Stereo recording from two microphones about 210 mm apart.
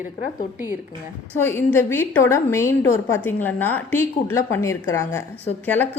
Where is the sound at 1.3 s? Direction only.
10° left (ahead or behind).